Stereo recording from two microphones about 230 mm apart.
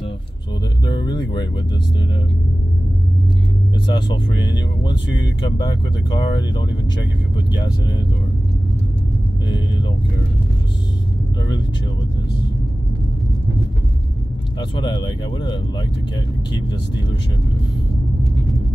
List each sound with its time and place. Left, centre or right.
0.8 s speech: centre
3.8 s speech: centre
5.0 s speech: left
5.6 s speech: centre
14.6 s speech: centre